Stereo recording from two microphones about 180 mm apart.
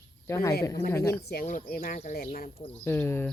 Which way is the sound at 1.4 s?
50° left (ahead or behind).